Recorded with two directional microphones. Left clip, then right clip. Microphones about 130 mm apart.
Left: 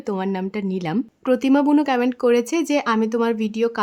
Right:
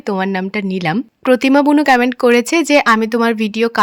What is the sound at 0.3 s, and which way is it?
Speech, 25° right (ahead or behind).